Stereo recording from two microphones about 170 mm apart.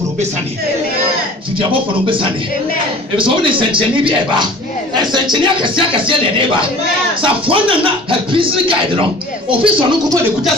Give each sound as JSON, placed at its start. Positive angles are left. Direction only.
{"t": 1.6, "sound": "speech", "side_deg": -30}